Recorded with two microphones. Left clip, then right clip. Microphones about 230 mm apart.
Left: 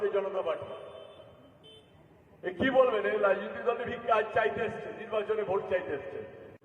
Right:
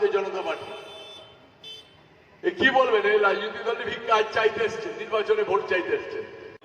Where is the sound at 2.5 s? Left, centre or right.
Right.